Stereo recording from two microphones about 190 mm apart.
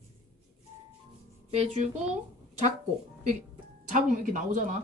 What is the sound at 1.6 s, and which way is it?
Speech, 35° right (ahead or behind).